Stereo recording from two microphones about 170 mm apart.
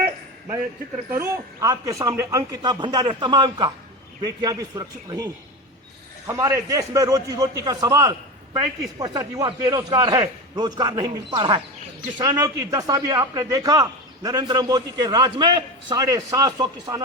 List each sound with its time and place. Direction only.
1.1 s a man's voice: 20° right (ahead or behind)